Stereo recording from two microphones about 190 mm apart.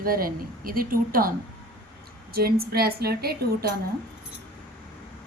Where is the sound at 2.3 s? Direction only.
55° right (ahead or behind).